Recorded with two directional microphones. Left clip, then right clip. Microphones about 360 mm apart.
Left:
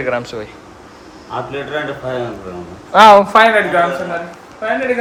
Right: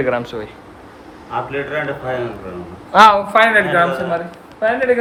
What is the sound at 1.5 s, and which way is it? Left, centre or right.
A man's voice, centre.